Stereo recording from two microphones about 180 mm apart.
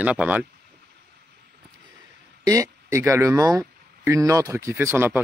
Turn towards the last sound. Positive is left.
turn(degrees=-15)  # may be behind; listen again after turning